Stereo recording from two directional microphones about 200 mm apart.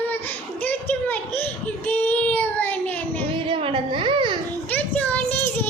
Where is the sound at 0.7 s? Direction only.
10° left (ahead or behind).